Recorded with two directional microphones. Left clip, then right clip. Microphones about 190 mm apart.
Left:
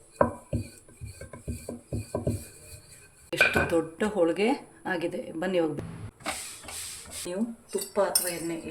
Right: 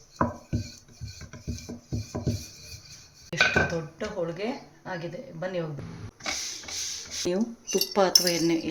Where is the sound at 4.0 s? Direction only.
60° left (ahead or behind).